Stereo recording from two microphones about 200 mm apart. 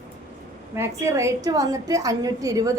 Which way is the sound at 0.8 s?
15° right (ahead or behind).